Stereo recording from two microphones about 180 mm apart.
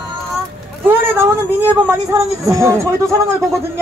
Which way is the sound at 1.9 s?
15° right (ahead or behind).